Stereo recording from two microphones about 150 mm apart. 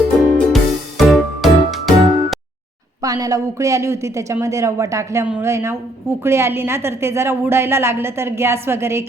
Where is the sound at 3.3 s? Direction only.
20° right (ahead or behind).